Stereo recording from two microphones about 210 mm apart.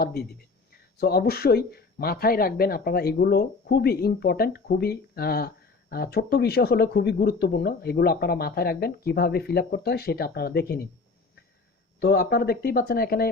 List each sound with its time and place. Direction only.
0.0 s speech: 50° left (ahead or behind)
11.9 s speech: 50° left (ahead or behind)